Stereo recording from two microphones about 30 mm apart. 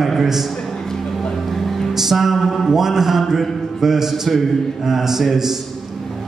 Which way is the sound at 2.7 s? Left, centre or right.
Centre.